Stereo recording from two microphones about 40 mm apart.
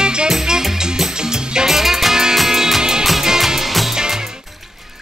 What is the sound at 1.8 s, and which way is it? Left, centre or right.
Music, centre.